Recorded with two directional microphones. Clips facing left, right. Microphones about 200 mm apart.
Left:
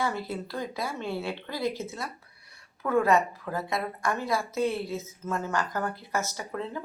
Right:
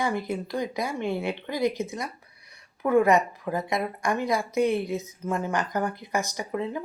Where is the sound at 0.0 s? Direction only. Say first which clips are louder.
Right 3 dB; 15° right (ahead or behind).